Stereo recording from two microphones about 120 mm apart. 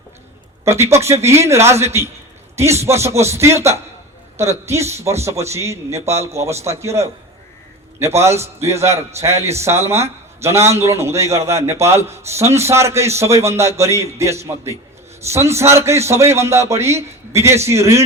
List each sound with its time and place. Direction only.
0.6 s a man's voice: 20° right (ahead or behind)